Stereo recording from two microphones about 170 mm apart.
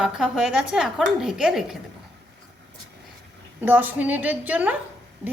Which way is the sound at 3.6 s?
10° right (ahead or behind).